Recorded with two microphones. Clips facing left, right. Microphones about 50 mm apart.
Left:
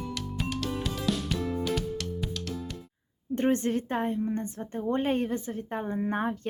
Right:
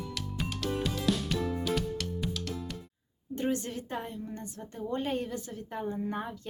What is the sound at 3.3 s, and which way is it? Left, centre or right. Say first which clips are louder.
Speech: left 6 dB; left.